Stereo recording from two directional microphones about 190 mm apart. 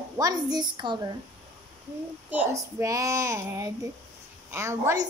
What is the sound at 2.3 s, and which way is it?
A child's voice, 10° right (ahead or behind).